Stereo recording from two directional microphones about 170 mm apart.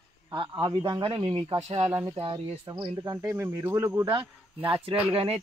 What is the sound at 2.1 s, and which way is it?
Speech, 30° right (ahead or behind).